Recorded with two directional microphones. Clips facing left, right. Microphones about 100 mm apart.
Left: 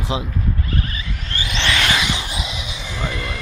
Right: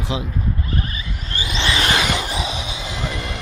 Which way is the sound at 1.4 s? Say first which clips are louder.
Even; 30° right (ahead or behind).